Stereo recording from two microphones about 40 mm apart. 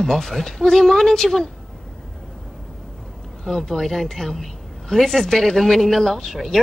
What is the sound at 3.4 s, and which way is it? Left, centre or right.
A woman's voice, centre.